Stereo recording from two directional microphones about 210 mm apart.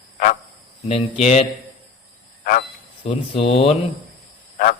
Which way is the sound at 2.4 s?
40° left (ahead or behind).